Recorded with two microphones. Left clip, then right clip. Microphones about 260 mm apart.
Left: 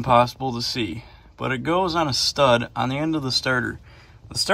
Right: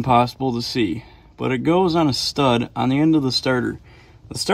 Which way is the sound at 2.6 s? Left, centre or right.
Right.